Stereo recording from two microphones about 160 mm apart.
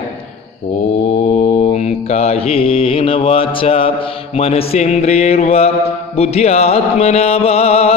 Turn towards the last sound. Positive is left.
turn(degrees=40)  # may be behind; listen again after turning